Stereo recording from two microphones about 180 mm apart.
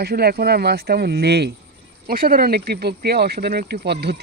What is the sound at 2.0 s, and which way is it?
Speech, 55° right (ahead or behind).